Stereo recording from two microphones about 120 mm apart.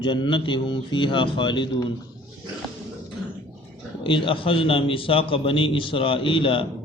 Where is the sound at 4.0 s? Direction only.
45° left (ahead or behind).